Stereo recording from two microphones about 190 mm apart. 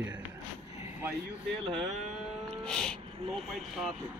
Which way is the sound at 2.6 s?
5° left (ahead or behind).